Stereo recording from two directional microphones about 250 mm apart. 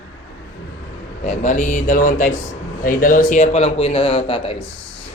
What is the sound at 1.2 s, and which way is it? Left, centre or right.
A man's voice, left.